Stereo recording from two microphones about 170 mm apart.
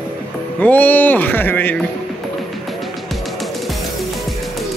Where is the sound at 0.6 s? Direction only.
10° left (ahead or behind).